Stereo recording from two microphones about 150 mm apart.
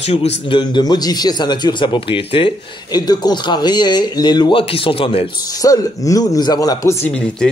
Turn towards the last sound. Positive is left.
turn(degrees=5)  # may be behind; listen again after turning